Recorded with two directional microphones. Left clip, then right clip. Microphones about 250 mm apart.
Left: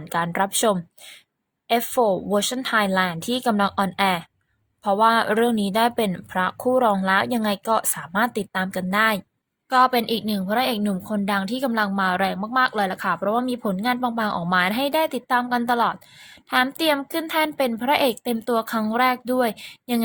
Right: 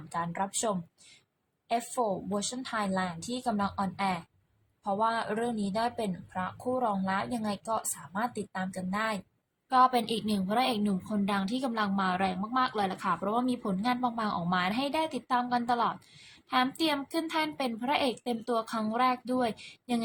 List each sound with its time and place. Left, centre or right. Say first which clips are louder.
0.1 s speech: left 10 dB; left
9.6 s a woman's voice: left 6 dB; left